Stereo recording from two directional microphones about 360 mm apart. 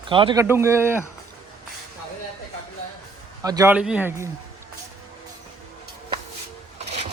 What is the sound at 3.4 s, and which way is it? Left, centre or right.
Speech, centre.